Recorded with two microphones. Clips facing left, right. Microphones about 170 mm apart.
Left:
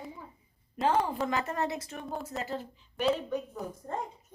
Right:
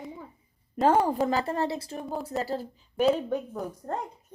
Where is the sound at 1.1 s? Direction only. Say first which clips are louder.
Right 5 dB; 40° right (ahead or behind).